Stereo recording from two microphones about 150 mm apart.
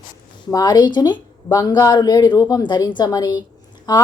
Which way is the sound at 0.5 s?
25° left (ahead or behind).